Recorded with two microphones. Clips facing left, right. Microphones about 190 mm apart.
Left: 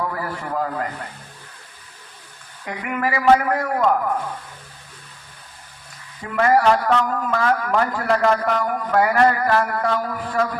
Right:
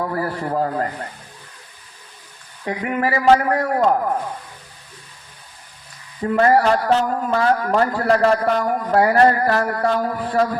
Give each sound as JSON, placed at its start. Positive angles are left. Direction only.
{"t": 0.0, "sound": "a man's voice", "side_deg": -35}
{"t": 2.6, "sound": "a man's voice", "side_deg": -35}
{"t": 6.2, "sound": "a man's voice", "side_deg": -35}